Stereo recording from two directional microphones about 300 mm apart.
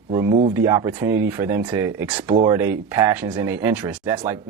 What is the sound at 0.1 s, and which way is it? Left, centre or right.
Speech, centre.